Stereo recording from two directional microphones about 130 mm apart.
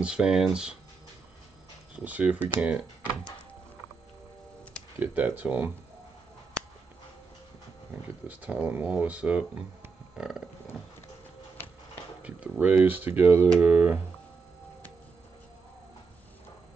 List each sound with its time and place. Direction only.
0.0 s speech: 5° right (ahead or behind)
2.0 s speech: 10° right (ahead or behind)
5.0 s speech: 15° right (ahead or behind)
8.3 s speech: 10° right (ahead or behind)
11.5 s a sound: 15° left (ahead or behind)
12.2 s speech: 10° right (ahead or behind)